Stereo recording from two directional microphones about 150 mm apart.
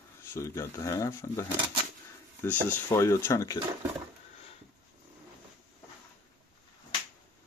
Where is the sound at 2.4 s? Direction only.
15° left (ahead or behind).